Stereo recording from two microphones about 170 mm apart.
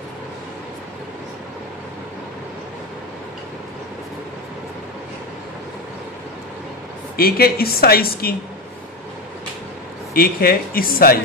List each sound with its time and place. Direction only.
7.2 s speech: 65° left (ahead or behind)
10.1 s speech: 60° left (ahead or behind)